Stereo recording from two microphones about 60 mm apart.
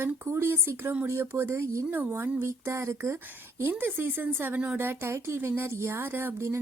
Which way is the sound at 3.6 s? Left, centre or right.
Right.